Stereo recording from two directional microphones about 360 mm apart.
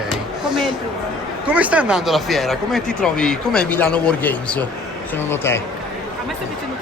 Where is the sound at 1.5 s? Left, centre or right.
Centre.